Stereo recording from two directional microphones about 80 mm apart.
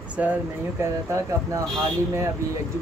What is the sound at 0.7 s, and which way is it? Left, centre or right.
Speech, right.